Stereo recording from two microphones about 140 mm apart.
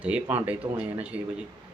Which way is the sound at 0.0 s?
10° right (ahead or behind).